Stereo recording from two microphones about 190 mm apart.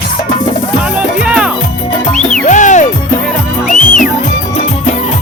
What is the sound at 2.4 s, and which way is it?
Music, 40° left (ahead or behind).